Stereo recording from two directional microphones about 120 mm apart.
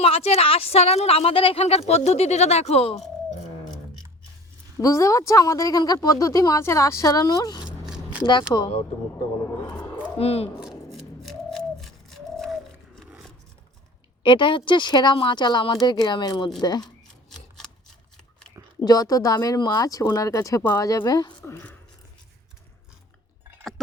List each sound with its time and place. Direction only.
0.0 s speech: 55° left (ahead or behind)
4.8 s a woman's voice: 25° left (ahead or behind)
7.6 s a sound: 5° right (ahead or behind)
8.2 s speech: 40° left (ahead or behind)
10.2 s speech: 60° left (ahead or behind)
10.9 s bird: centre (ahead or behind)
14.3 s speech: 45° left (ahead or behind)
16.8 s rub: 5° left (ahead or behind)
18.9 s a woman's voice: 30° left (ahead or behind)
21.4 s a sound: 20° left (ahead or behind)